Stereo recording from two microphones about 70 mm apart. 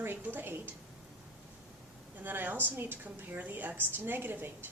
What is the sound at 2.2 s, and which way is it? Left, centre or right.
A woman's voice, right.